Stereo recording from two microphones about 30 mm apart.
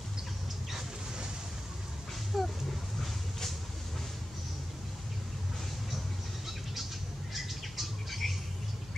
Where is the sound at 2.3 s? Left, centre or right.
Centre.